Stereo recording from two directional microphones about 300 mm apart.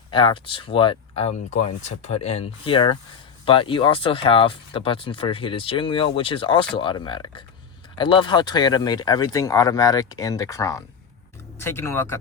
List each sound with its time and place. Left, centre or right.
0.1 s speech: centre